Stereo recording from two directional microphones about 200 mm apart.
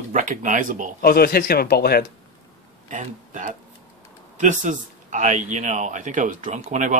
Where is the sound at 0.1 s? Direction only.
40° right (ahead or behind).